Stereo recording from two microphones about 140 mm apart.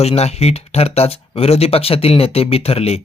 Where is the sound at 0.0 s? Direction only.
50° left (ahead or behind).